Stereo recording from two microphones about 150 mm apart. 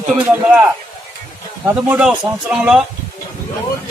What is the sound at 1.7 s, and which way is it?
A man's voice, 10° right (ahead or behind).